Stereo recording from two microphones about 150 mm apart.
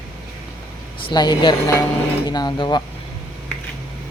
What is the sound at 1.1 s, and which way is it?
Speech, 30° left (ahead or behind).